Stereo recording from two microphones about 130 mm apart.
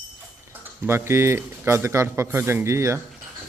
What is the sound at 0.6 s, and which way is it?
Speech, 15° right (ahead or behind).